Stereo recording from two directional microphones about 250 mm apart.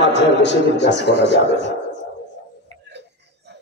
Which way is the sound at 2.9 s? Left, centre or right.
Right.